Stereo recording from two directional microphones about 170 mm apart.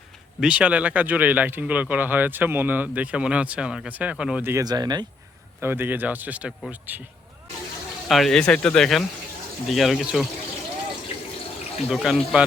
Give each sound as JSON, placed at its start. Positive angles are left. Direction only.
{"t": 0.3, "sound": "speech", "side_deg": -5}
{"t": 4.5, "sound": "speech", "side_deg": -25}
{"t": 5.5, "sound": "speech", "side_deg": -10}
{"t": 8.0, "sound": "speech", "side_deg": 0}
{"t": 11.9, "sound": "speech", "side_deg": -5}